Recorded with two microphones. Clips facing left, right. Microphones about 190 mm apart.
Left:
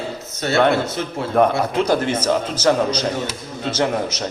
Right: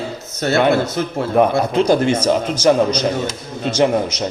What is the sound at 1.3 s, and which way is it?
A man's voice, 10° right (ahead or behind).